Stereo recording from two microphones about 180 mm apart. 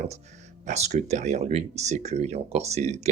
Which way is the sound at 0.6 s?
40° right (ahead or behind).